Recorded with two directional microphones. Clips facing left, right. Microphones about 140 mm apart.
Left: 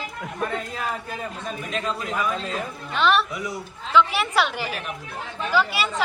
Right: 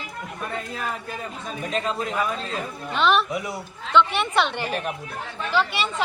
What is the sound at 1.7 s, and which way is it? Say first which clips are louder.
Speech: right 3 dB; 35° right (ahead or behind).